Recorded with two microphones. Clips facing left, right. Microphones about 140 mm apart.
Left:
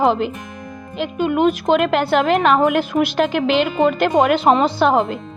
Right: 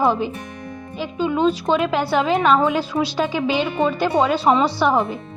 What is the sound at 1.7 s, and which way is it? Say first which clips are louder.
Speech: left 3 dB; 80° left.